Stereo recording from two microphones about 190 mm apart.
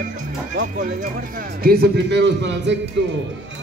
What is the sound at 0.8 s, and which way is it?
Speech, 45° right (ahead or behind).